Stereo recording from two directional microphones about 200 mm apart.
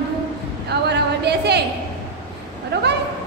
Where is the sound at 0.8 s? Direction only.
55° right (ahead or behind).